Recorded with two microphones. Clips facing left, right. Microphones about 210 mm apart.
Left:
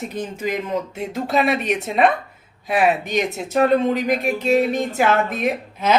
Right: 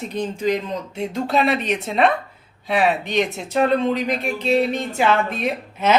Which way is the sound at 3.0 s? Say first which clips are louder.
Even; 40° left (ahead or behind).